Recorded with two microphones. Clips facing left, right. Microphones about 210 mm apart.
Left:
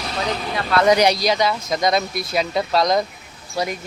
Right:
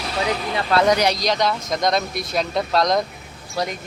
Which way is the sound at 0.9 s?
10° left (ahead or behind).